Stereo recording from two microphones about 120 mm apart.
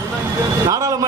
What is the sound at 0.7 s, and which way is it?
Speech, 30° right (ahead or behind).